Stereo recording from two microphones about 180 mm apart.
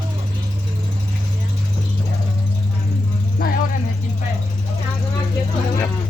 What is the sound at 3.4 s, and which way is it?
Vehicle, 60° left (ahead or behind).